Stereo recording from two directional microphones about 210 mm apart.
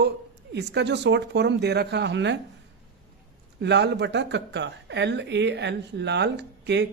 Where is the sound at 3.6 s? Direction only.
55° right (ahead or behind).